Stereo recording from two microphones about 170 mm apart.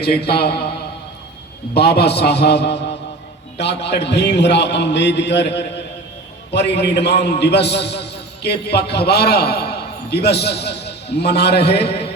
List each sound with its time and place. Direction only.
0.0 s a man's voice: 70° left (ahead or behind)
1.7 s a man's voice: 75° left (ahead or behind)